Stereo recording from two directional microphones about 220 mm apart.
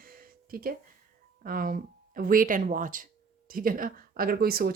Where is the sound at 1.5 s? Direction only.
40° right (ahead or behind).